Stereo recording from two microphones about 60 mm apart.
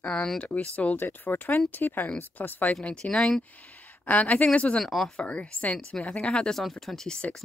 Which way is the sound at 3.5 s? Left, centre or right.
Left.